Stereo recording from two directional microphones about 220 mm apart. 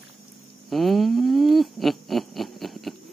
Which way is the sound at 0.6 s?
Centre (ahead or behind).